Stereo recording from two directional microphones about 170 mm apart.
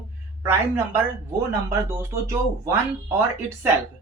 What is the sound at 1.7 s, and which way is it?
Speech, 15° right (ahead or behind).